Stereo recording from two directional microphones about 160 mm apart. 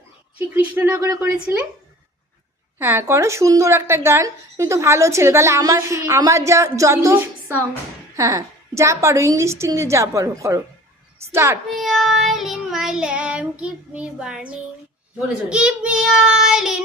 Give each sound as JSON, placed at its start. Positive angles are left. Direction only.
{"t": 0.3, "sound": "a woman's voice", "side_deg": -10}
{"t": 2.7, "sound": "a woman's voice", "side_deg": -15}
{"t": 11.7, "sound": "child singing", "side_deg": 0}